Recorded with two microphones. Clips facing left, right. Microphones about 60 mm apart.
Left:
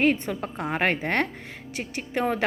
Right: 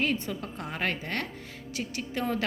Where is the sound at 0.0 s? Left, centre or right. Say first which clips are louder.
Left 6 dB; left.